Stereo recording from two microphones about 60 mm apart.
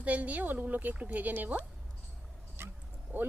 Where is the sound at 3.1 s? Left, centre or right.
Right.